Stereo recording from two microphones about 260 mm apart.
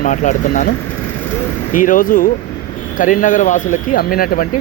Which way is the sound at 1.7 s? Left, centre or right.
Left.